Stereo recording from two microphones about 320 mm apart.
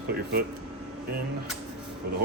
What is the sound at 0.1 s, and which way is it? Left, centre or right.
Speech, right.